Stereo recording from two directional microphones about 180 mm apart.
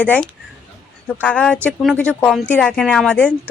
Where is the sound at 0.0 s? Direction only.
5° left (ahead or behind).